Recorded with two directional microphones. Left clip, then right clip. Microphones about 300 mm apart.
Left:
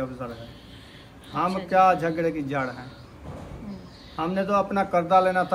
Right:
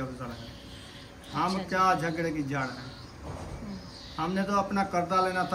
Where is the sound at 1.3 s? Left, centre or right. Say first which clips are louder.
Left 7 dB; centre.